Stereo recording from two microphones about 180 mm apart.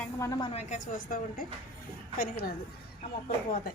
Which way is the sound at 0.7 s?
50° left (ahead or behind).